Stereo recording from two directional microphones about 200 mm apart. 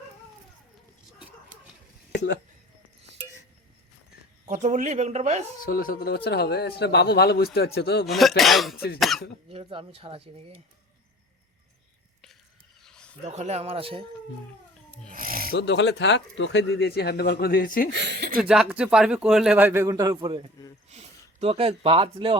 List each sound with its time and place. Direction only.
2.1 s speech: 60° left (ahead or behind)
4.4 s speech: 35° right (ahead or behind)
5.6 s speech: 45° left (ahead or behind)
8.0 s a man's voice: centre (ahead or behind)
8.7 s speech: 50° left (ahead or behind)
9.0 s a man's voice: centre (ahead or behind)
9.5 s speech: 25° right (ahead or behind)
12.8 s a sound: 5° left (ahead or behind)
13.2 s speech: 35° right (ahead or behind)
15.1 s owl: 45° right (ahead or behind)
15.5 s speech: 60° left (ahead or behind)
17.9 s speech: 60° right (ahead or behind)
18.3 s a man's voice: 5° right (ahead or behind); by 22.4 s 30° right (ahead or behind)